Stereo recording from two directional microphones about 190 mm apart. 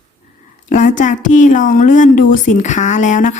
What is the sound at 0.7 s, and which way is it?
A woman's voice, 40° left (ahead or behind).